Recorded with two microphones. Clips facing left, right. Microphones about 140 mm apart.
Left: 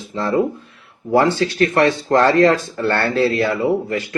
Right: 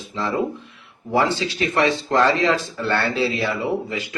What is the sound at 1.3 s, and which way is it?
Speech, 55° left (ahead or behind).